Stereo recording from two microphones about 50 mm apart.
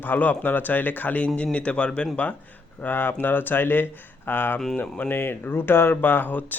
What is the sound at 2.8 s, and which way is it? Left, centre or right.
Speech, left.